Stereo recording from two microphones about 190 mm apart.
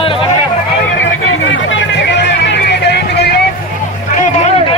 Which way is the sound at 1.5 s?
70° left (ahead or behind).